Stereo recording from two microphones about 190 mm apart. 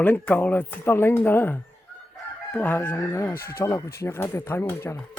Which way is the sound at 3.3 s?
50° left (ahead or behind).